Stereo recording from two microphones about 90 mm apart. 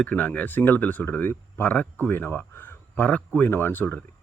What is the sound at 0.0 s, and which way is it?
Speech, 15° left (ahead or behind).